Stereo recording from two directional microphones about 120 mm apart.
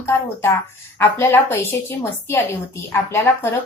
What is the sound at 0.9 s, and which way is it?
Speech, 20° left (ahead or behind).